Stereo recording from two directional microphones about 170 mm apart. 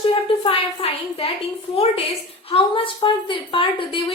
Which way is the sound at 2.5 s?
30° left (ahead or behind).